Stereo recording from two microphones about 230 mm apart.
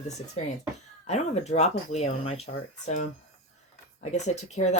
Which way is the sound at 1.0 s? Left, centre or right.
Left.